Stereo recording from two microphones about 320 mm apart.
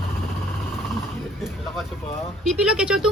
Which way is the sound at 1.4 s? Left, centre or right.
Centre.